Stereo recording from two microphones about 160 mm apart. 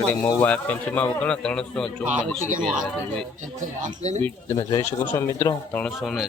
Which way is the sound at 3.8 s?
45° right (ahead or behind).